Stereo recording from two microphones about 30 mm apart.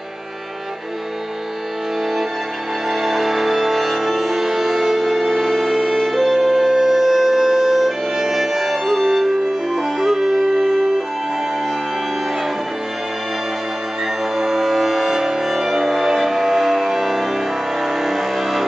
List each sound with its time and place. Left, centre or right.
2.9 s music: centre
14.3 s music: centre